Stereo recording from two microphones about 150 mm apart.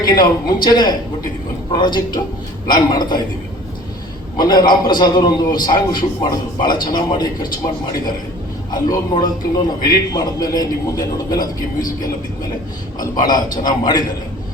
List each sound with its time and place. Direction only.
0.1 s a man's voice: 30° left (ahead or behind)
4.4 s a man's voice: 30° left (ahead or behind)
8.7 s a man's voice: 25° left (ahead or behind)
13.0 s a man's voice: 25° left (ahead or behind)